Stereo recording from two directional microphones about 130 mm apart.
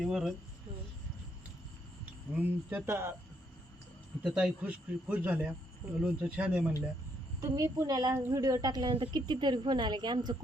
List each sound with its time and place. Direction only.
0.0 s speech: 5° right (ahead or behind)
2.3 s speech: 15° right (ahead or behind)
4.2 s speech: 5° right (ahead or behind)
7.4 s a woman's voice: 25° right (ahead or behind)
8.1 s a woman's voice: 20° right (ahead or behind); by 10.3 s 35° right (ahead or behind)